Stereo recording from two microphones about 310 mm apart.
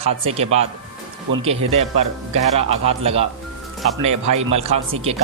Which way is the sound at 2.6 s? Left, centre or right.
Centre.